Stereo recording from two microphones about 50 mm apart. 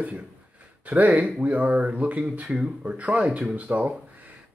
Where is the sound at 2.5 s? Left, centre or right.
Centre.